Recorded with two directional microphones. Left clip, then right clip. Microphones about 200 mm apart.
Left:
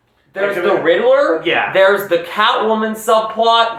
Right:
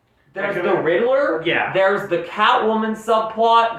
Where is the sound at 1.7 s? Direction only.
15° left (ahead or behind).